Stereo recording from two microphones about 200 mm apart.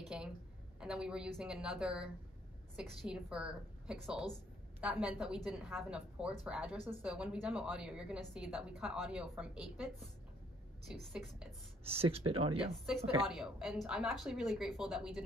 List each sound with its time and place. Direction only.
0.1 s a woman's voice: 5° right (ahead or behind)
11.8 s speech: 30° right (ahead or behind)
13.3 s a woman's voice: centre (ahead or behind)